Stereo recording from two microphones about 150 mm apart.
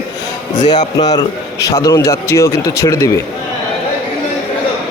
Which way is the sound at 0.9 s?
25° left (ahead or behind).